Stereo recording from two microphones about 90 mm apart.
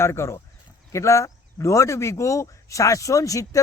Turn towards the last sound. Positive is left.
turn(degrees=40)  # may be behind; listen again after turning